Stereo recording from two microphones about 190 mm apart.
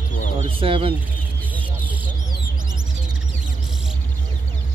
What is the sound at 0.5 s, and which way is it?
Speech, 30° right (ahead or behind).